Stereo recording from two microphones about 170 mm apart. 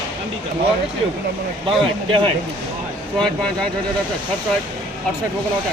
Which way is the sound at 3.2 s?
5° left (ahead or behind).